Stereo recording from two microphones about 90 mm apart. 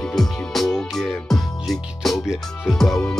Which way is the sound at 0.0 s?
5° left (ahead or behind).